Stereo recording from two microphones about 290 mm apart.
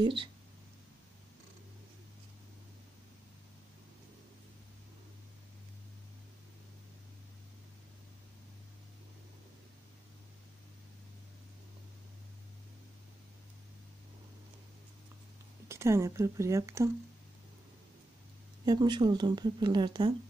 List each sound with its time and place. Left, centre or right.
0.0 s speech: centre
15.7 s speech: centre
18.7 s speech: centre